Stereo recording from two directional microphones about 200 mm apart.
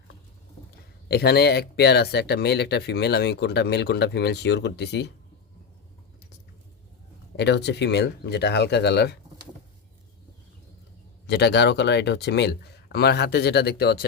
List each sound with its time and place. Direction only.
1.0 s speech: 55° left (ahead or behind)
7.3 s speech: 60° left (ahead or behind)
11.3 s speech: 55° left (ahead or behind)